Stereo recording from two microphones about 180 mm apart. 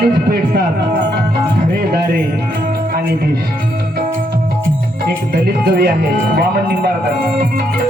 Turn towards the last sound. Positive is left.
turn(degrees=-65)  # may be behind; listen again after turning